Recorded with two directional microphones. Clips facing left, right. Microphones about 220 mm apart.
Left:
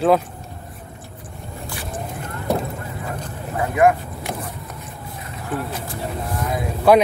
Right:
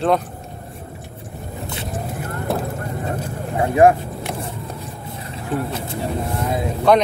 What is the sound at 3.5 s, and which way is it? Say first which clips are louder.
Speech: right 3 dB; 30° right (ahead or behind).